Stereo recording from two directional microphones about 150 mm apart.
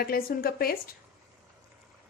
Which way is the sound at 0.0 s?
80° left.